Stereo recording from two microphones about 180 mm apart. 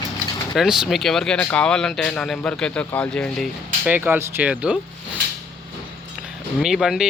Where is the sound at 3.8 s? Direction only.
10° right (ahead or behind).